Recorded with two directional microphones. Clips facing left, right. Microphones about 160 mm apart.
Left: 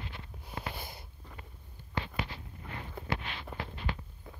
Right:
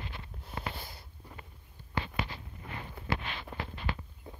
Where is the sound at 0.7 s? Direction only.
15° left (ahead or behind).